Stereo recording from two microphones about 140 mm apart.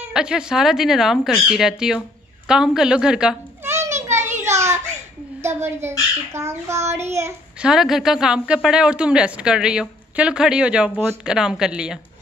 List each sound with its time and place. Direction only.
0.0 s a woman's voice: 5° right (ahead or behind)
3.6 s a sound: 20° right (ahead or behind)
5.4 s speech: 15° right (ahead or behind)
7.6 s a woman's voice: 5° right (ahead or behind)